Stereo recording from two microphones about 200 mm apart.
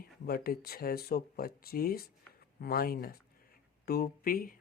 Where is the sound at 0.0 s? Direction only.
50° left (ahead or behind).